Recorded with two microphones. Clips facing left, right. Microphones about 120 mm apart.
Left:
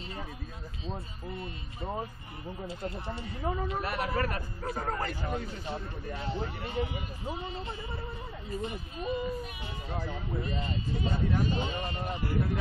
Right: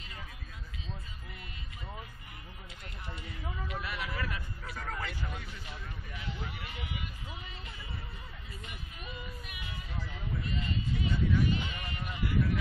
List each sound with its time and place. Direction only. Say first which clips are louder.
0.8 s speech: left 11 dB; 30° left (ahead or behind)